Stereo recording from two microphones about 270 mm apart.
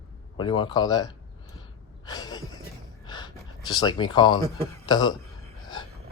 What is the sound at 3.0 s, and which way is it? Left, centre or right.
Speech, centre.